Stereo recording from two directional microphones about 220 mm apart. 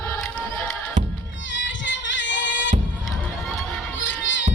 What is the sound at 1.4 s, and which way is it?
Music, 55° left (ahead or behind).